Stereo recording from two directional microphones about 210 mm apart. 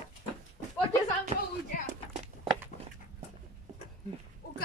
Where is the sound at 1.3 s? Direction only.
30° right (ahead or behind).